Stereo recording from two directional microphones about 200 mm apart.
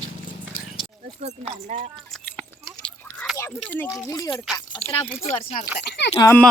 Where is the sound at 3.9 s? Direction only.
15° left (ahead or behind).